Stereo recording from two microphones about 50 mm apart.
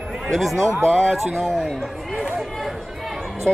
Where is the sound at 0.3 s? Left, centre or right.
Centre.